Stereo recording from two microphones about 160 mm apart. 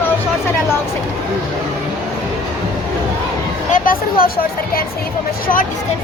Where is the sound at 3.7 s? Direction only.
60° left (ahead or behind).